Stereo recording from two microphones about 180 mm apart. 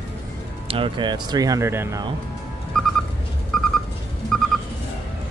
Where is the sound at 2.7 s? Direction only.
5° left (ahead or behind).